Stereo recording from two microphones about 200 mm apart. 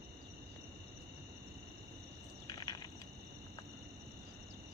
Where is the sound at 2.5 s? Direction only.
20° left (ahead or behind).